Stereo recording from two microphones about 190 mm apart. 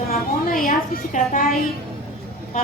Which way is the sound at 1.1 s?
45° left (ahead or behind).